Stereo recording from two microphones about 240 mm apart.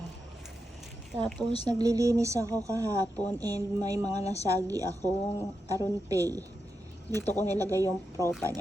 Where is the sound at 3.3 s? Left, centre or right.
Centre.